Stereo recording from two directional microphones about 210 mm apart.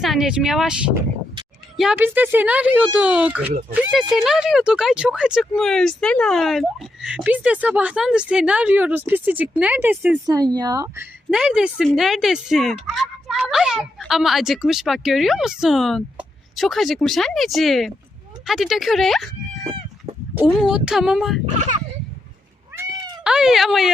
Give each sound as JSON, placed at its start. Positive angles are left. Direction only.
{"t": 0.0, "sound": "a woman's voice", "side_deg": 0}
{"t": 20.3, "sound": "a woman's voice", "side_deg": -5}
{"t": 21.5, "sound": "speech", "side_deg": -35}
{"t": 23.2, "sound": "a woman's voice", "side_deg": -5}